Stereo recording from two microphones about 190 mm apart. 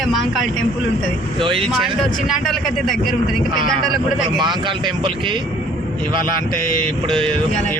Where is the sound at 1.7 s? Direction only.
Centre (ahead or behind).